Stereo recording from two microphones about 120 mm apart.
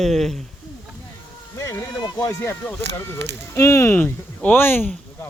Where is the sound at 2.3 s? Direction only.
15° left (ahead or behind).